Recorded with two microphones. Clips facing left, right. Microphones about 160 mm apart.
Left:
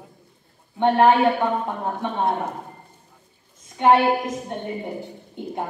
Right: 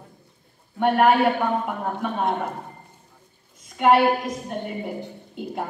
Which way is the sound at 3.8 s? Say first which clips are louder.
Left 1 dB; 25° left (ahead or behind).